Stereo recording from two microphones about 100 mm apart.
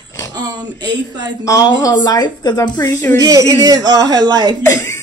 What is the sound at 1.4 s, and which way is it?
Speech, 35° left (ahead or behind).